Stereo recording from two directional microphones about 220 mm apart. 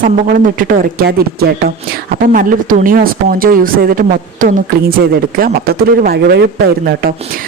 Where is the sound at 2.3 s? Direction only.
40° right (ahead or behind).